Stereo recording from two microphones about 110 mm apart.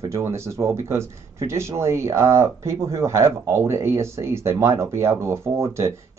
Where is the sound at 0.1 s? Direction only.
25° right (ahead or behind).